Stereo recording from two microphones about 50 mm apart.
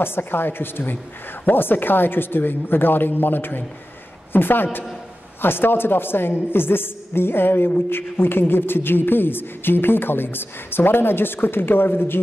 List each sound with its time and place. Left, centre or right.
0.0 s a woman's voice: left